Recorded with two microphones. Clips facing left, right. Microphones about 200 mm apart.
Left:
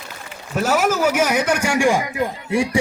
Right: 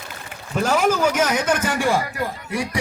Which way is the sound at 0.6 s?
5° left (ahead or behind).